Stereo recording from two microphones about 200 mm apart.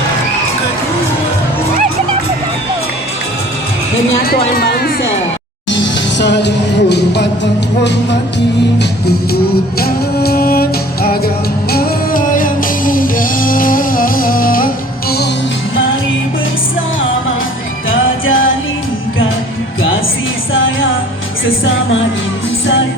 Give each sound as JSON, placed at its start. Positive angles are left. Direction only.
{"t": 4.2, "sound": "speech", "side_deg": 50}
{"t": 5.7, "sound": "music", "side_deg": 60}
{"t": 8.8, "sound": "speech", "side_deg": 55}
{"t": 9.8, "sound": "music", "side_deg": 50}
{"t": 17.8, "sound": "music", "side_deg": 75}